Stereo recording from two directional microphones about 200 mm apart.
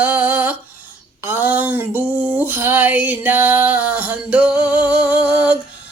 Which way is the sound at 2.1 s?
5° right (ahead or behind).